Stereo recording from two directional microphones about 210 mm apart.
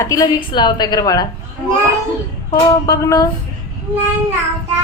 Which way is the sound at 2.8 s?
15° left (ahead or behind).